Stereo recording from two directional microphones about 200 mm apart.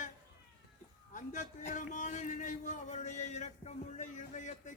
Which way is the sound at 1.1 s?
40° left (ahead or behind).